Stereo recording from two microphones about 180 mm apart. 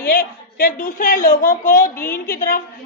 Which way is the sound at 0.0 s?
55° left (ahead or behind).